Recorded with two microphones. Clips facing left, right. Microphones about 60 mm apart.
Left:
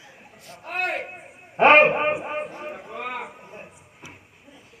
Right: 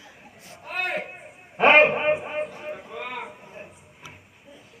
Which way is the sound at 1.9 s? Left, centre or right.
Centre.